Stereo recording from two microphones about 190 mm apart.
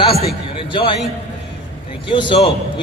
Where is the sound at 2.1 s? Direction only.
25° left (ahead or behind).